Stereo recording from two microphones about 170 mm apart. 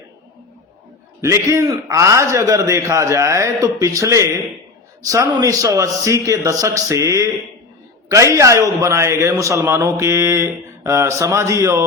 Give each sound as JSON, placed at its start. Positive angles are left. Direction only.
{"t": 1.2, "sound": "a man's voice", "side_deg": -20}